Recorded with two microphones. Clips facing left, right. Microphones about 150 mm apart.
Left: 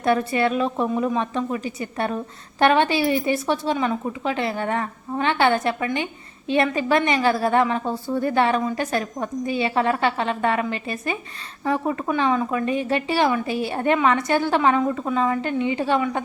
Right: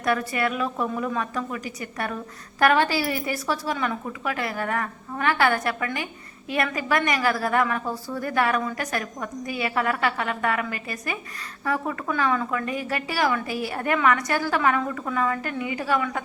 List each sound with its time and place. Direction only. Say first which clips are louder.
0.0 s a woman's voice: left 4 dB; 25° left (ahead or behind)